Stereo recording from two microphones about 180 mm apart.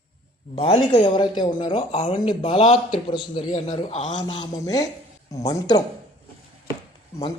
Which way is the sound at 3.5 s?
40° left (ahead or behind).